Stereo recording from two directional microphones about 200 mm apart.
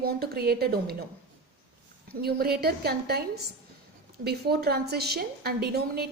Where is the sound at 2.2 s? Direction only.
50° right (ahead or behind).